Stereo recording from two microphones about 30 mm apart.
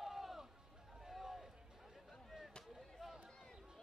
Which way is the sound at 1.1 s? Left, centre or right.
Centre.